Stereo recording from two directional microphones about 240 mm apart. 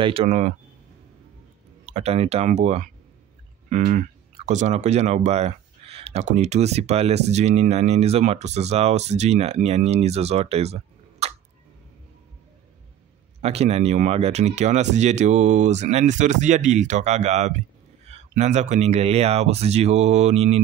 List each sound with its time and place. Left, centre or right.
0.0 s speech: right
1.9 s speech: right
13.4 s speech: right